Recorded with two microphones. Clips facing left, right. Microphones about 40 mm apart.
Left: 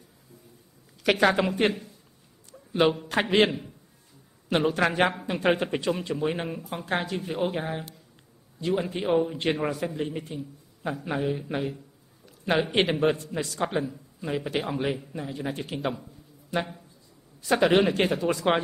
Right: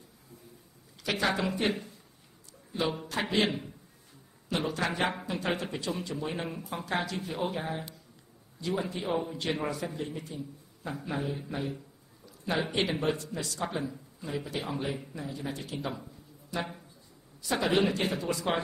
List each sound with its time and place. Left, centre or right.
1.1 s a man's voice: left
2.7 s a man's voice: left
12.3 s a sound: left
13.0 s a man's voice: left
14.2 s a man's voice: left